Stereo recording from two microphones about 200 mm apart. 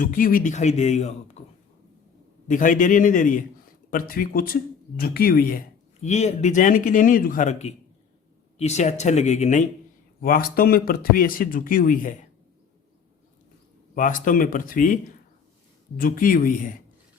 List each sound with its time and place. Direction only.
0.0 s a man's voice: 45° left (ahead or behind)
2.5 s a man's voice: 40° left (ahead or behind)
10.2 s speech: 45° left (ahead or behind)
13.9 s speech: 40° left (ahead or behind)
16.0 s speech: 45° left (ahead or behind)